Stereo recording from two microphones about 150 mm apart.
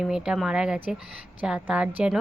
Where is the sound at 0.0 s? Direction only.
5° right (ahead or behind).